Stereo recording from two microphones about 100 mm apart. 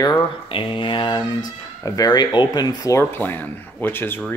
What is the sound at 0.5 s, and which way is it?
Mantra, 60° left (ahead or behind).